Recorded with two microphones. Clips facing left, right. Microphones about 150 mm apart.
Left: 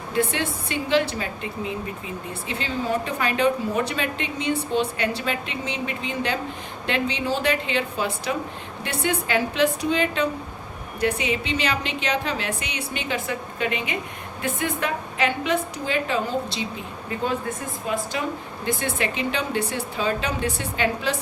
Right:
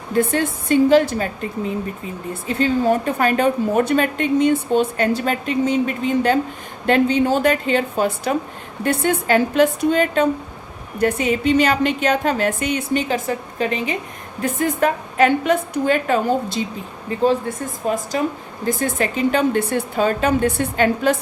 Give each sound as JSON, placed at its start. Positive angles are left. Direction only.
{"t": 0.1, "sound": "a woman's voice", "side_deg": -45}
{"t": 17.1, "sound": "speech", "side_deg": -35}
{"t": 17.8, "sound": "a woman's voice", "side_deg": -45}